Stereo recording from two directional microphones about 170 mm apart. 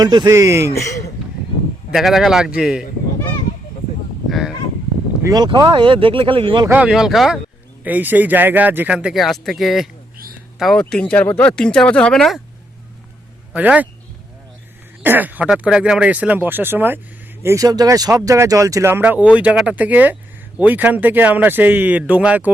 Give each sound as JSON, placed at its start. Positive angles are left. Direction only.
{"t": 0.0, "sound": "speech", "side_deg": -25}
{"t": 0.7, "sound": "speech", "side_deg": 20}
{"t": 1.9, "sound": "speech", "side_deg": 0}
{"t": 4.3, "sound": "honk", "side_deg": 0}
{"t": 5.2, "sound": "speech", "side_deg": -25}
{"t": 6.7, "sound": "speech", "side_deg": -5}
{"t": 13.5, "sound": "speech", "side_deg": -5}
{"t": 15.0, "sound": "speech", "side_deg": -10}